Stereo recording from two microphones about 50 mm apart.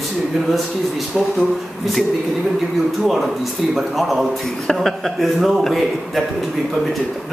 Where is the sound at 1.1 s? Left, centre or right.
Centre.